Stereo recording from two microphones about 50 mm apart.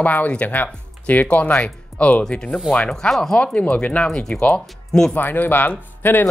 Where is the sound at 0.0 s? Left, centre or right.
Left; by 3.3 s centre.